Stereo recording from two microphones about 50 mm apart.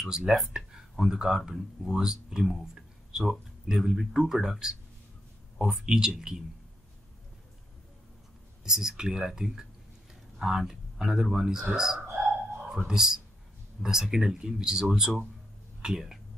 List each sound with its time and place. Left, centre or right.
0.0 s speech: centre
8.6 s speech: centre